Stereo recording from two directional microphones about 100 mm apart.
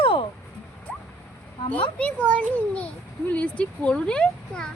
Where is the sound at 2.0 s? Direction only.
15° left (ahead or behind).